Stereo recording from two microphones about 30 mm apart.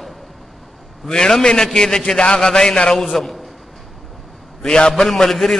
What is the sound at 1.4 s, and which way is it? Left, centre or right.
A man's voice, centre.